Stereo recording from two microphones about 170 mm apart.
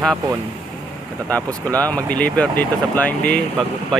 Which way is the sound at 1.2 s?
10° left (ahead or behind).